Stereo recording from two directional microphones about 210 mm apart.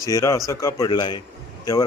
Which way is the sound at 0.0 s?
15° left (ahead or behind).